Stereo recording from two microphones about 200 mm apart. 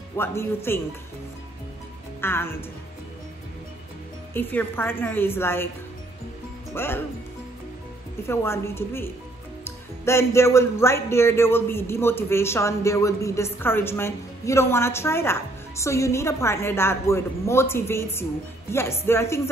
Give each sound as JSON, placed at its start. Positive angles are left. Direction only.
{"t": 0.2, "sound": "speech", "side_deg": 10}
{"t": 2.2, "sound": "speech", "side_deg": 10}
{"t": 4.3, "sound": "speech", "side_deg": 10}
{"t": 6.7, "sound": "speech", "side_deg": 10}
{"t": 8.3, "sound": "speech", "side_deg": 10}